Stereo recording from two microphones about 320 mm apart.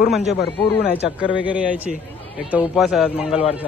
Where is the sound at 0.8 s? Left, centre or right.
Left.